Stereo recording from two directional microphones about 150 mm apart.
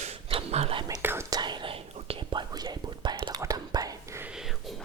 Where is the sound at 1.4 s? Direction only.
30° right (ahead or behind).